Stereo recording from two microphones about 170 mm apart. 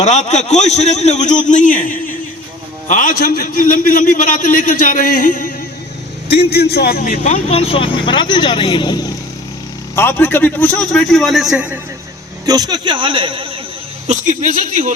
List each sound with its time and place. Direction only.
0.0 s a man's voice: 45° left (ahead or behind)
6.2 s a man's voice: 70° left (ahead or behind); by 11.8 s 5° right (ahead or behind)
12.5 s a man's voice: 25° right (ahead or behind)
14.1 s a man's voice: 50° right (ahead or behind)